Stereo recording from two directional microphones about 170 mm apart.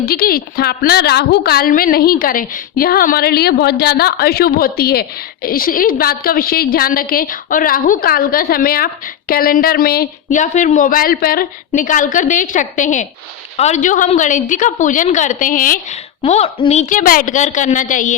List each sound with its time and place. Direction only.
0.0 s a woman's voice: 65° left (ahead or behind)
16.2 s a woman's voice: 40° left (ahead or behind)